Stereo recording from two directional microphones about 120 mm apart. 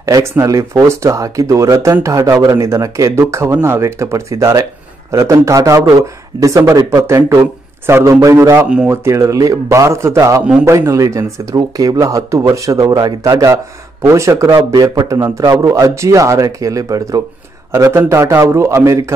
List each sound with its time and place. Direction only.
0.0 s speech: 25° right (ahead or behind)